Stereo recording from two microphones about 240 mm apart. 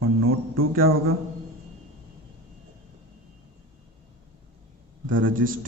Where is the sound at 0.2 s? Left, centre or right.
Right.